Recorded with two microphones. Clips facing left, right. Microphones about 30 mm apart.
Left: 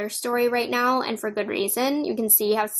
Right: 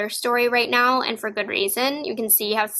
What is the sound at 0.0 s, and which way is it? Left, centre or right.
Speech, right.